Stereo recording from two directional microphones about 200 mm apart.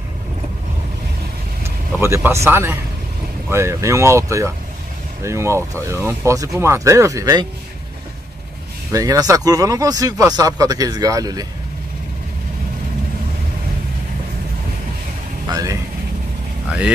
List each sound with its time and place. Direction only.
1.6 s vehicle: 15° right (ahead or behind)
2.4 s speech: 10° right (ahead or behind)
8.9 s speech: 15° right (ahead or behind)
15.5 s speech: 15° right (ahead or behind)